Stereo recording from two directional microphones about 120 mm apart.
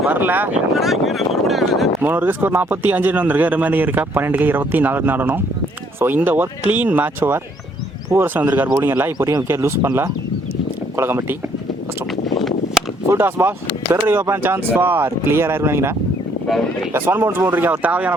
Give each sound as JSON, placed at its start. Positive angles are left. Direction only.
{"t": 0.1, "sound": "a man's voice", "side_deg": -15}
{"t": 0.7, "sound": "speech", "side_deg": 0}
{"t": 2.0, "sound": "a man's voice", "side_deg": -15}
{"t": 12.4, "sound": "a sound", "side_deg": 0}
{"t": 13.1, "sound": "a man's voice", "side_deg": -20}